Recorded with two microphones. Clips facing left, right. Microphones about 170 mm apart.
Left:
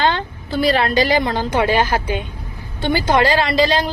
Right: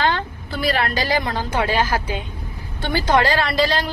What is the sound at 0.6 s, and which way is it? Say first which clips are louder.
A woman's voice: left 5 dB; 25° left (ahead or behind).